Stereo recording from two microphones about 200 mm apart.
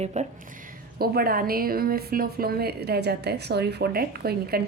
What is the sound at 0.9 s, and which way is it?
A woman's voice, 50° right (ahead or behind).